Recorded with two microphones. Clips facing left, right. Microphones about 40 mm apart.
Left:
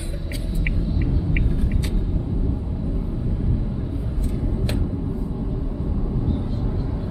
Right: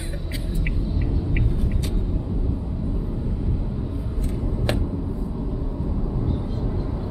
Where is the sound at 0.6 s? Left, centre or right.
Centre.